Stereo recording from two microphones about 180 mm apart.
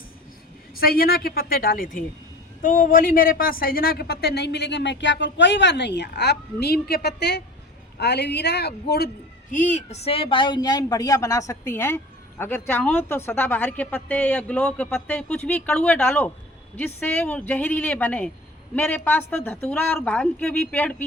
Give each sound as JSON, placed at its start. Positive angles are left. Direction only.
{"t": 0.8, "sound": "a woman's voice", "side_deg": 55}
{"t": 9.5, "sound": "speech", "side_deg": 45}